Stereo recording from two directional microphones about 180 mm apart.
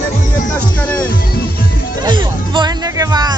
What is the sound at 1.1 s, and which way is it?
Music, 55° left (ahead or behind).